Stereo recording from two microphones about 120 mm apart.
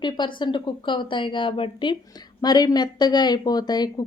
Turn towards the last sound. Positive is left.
turn(degrees=35)  # may be behind; listen again after turning